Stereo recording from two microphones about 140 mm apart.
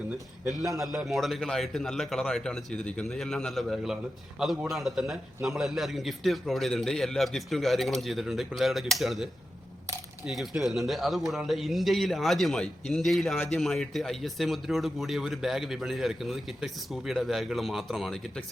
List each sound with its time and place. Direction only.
0.7 s speech: centre (ahead or behind)